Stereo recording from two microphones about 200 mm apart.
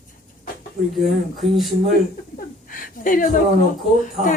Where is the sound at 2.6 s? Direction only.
45° left (ahead or behind).